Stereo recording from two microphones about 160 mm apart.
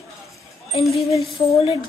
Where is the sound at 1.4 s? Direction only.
35° left (ahead or behind).